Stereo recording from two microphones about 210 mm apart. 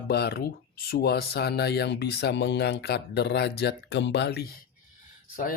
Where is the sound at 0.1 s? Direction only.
50° left (ahead or behind).